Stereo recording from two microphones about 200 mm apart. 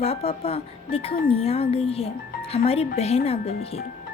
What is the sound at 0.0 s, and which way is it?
Speech, 30° left (ahead or behind).